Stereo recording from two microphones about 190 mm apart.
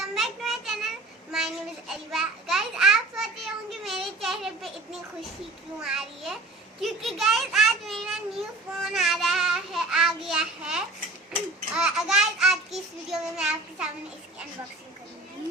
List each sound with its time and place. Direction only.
0.0 s child singing: centre (ahead or behind)
1.9 s a child's voice: centre (ahead or behind)